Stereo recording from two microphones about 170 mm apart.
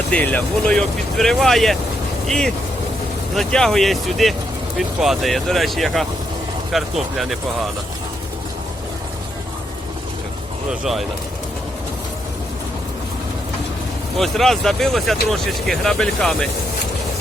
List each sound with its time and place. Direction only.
0.1 s speech: 10° left (ahead or behind)
10.7 s speech: centre (ahead or behind)
14.2 s speech: centre (ahead or behind)